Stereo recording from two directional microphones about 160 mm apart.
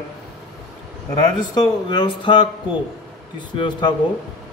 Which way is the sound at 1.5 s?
25° left (ahead or behind).